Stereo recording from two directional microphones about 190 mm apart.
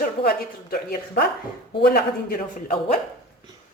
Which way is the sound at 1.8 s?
55° left (ahead or behind).